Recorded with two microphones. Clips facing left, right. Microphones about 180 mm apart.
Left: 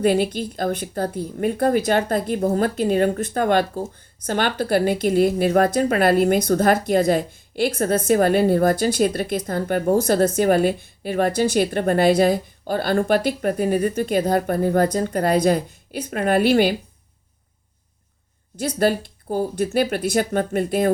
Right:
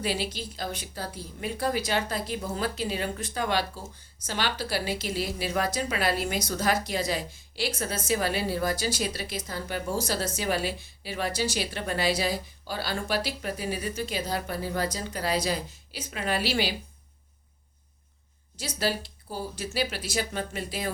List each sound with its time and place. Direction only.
0.0 s a woman's voice: 50° left (ahead or behind)
18.6 s a woman's voice: 55° left (ahead or behind)